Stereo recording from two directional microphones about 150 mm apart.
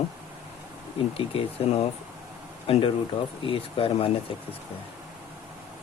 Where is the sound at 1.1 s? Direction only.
40° left (ahead or behind).